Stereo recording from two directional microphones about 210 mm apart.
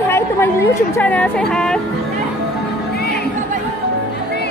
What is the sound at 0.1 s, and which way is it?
A woman's voice, 10° left (ahead or behind).